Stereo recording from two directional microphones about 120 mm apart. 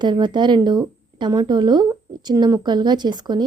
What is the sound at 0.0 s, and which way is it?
Speech, 40° right (ahead or behind).